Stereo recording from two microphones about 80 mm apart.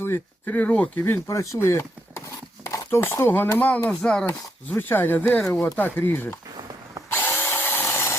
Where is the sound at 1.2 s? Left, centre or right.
Left.